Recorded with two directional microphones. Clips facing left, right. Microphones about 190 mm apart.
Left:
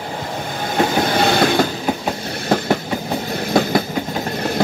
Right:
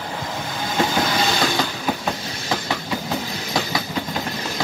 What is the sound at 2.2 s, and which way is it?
Train, 55° left (ahead or behind).